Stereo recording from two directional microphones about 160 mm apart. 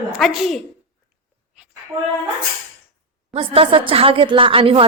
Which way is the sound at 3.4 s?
35° right (ahead or behind).